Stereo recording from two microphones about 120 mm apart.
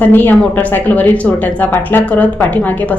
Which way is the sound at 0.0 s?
15° left (ahead or behind).